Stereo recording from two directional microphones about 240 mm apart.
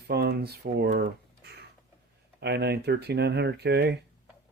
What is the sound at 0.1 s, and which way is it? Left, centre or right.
Speech, right.